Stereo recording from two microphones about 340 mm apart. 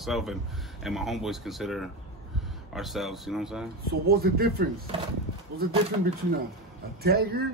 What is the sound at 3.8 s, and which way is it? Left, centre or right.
Speech, right.